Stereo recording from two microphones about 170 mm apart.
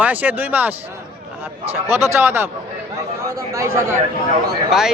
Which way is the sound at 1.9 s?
15° right (ahead or behind).